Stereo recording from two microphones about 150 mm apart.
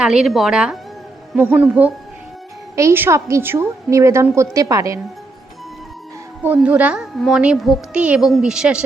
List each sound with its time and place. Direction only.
0.0 s a woman's voice: 5° right (ahead or behind); by 4.9 s 20° right (ahead or behind)
6.4 s a woman's voice: 10° right (ahead or behind)